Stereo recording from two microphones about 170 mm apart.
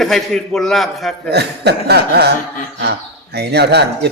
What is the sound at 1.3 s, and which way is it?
Speech, 75° right (ahead or behind).